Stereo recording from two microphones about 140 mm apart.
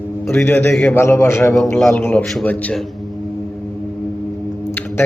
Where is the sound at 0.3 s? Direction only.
15° left (ahead or behind).